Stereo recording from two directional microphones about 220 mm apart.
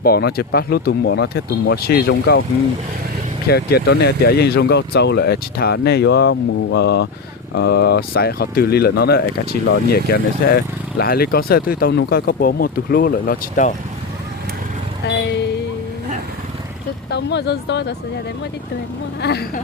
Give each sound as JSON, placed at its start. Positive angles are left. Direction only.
{"t": 0.0, "sound": "speech", "side_deg": 45}
{"t": 3.5, "sound": "speech", "side_deg": 45}
{"t": 15.0, "sound": "music", "side_deg": 50}
{"t": 17.1, "sound": "speech", "side_deg": 50}
{"t": 19.2, "sound": "speech", "side_deg": 45}